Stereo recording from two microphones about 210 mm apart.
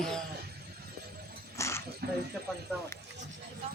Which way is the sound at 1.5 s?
15° left (ahead or behind).